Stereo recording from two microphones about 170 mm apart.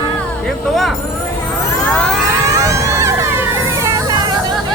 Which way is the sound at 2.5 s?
15° right (ahead or behind).